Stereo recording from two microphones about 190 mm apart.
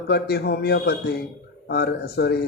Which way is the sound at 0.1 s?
60° left (ahead or behind).